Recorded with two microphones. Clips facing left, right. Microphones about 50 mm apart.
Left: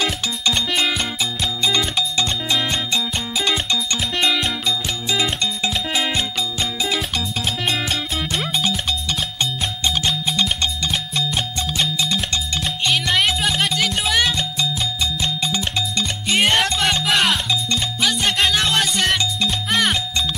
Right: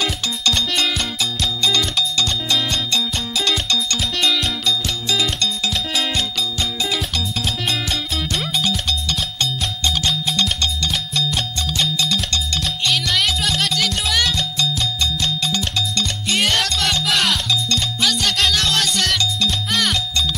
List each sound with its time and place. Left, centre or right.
0.0 s music: centre
10.0 s music: centre